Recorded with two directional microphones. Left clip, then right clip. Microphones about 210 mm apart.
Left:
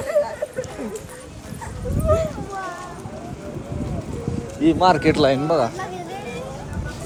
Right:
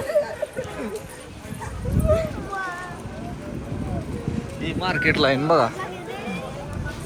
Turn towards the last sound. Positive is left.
turn(degrees=10)  # may be behind; listen again after turning